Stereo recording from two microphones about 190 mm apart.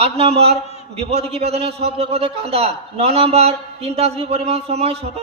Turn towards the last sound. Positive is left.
turn(degrees=-30)  # may be behind; listen again after turning